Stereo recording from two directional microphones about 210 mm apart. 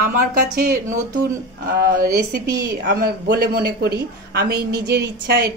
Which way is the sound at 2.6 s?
45° right (ahead or behind).